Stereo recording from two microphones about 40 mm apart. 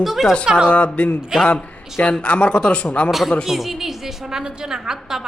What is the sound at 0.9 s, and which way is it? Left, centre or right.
Speech, left.